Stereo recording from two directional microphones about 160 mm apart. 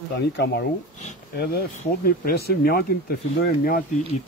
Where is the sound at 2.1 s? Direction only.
75° left (ahead or behind).